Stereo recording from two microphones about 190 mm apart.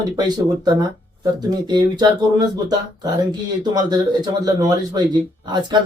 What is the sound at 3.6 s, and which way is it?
Speech, 20° right (ahead or behind).